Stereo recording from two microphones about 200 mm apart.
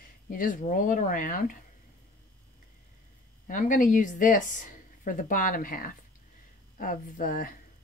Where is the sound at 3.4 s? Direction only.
40° left (ahead or behind).